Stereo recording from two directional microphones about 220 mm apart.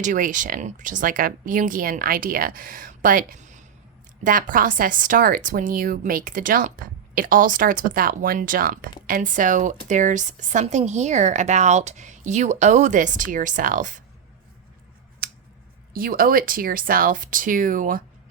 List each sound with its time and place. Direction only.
0.0 s speech: 35° right (ahead or behind)
15.2 s scissors: 40° right (ahead or behind)
15.9 s speech: 40° right (ahead or behind)